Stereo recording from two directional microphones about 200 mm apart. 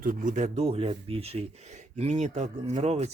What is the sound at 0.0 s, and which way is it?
Speech, 40° right (ahead or behind).